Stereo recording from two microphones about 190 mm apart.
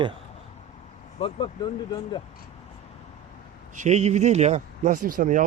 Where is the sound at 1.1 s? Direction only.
30° left (ahead or behind).